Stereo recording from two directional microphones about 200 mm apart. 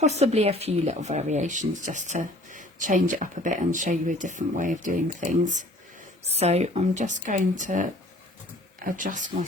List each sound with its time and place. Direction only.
0.2 s speech: 30° right (ahead or behind)